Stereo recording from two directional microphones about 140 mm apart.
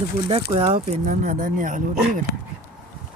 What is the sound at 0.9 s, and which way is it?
Speech, 65° right (ahead or behind).